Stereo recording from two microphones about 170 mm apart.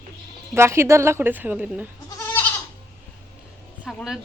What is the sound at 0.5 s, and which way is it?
A woman's voice, 15° right (ahead or behind).